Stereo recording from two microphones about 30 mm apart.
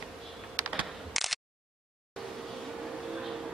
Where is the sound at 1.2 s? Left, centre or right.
Centre.